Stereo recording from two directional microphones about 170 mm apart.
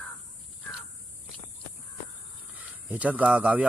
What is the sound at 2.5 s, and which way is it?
Speech, 10° right (ahead or behind).